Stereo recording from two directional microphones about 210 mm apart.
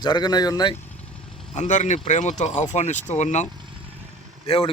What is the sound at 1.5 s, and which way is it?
Speech, 35° left (ahead or behind).